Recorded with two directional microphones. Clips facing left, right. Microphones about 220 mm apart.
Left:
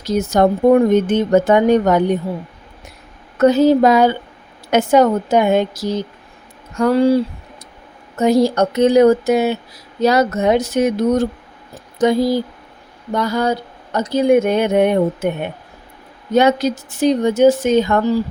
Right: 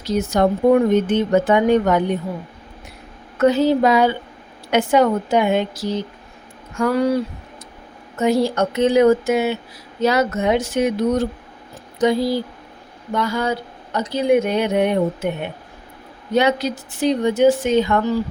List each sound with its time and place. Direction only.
0.1 s speech: 45° left (ahead or behind)
3.3 s speech: 40° left (ahead or behind)
6.7 s speech: 30° left (ahead or behind)
8.2 s speech: 40° left (ahead or behind)
16.3 s speech: 45° left (ahead or behind)